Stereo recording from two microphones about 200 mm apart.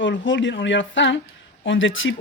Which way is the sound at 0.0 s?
65° left (ahead or behind).